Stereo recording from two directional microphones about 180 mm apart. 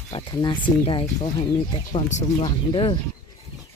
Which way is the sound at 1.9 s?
40° left (ahead or behind).